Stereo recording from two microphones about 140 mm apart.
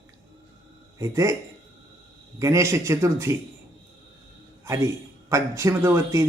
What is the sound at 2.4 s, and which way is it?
Speech, 20° right (ahead or behind).